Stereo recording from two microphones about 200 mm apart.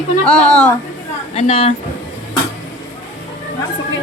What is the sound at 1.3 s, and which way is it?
Speech, 30° left (ahead or behind).